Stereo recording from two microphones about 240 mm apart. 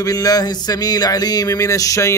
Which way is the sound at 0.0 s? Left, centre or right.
Centre.